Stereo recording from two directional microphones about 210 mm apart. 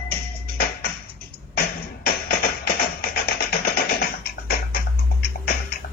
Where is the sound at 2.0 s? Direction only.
45° left (ahead or behind).